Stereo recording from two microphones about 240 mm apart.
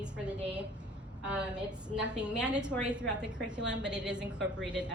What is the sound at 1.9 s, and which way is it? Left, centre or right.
A woman's voice, centre.